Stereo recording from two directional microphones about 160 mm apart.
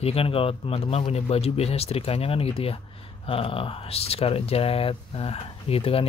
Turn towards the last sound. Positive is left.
turn(degrees=35)  # may be behind; listen again after turning